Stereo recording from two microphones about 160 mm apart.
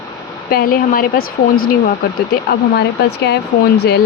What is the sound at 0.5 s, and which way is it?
Speech, 65° left (ahead or behind).